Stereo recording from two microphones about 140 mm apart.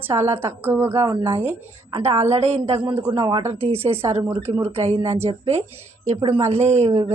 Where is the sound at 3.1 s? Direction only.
40° right (ahead or behind).